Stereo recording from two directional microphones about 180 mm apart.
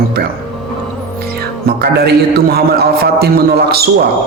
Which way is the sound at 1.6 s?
60° right (ahead or behind).